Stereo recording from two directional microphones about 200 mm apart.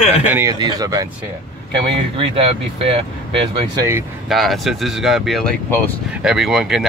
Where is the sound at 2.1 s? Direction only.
25° right (ahead or behind).